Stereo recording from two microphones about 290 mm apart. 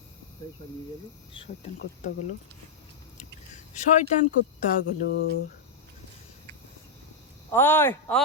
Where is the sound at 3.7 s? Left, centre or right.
Left.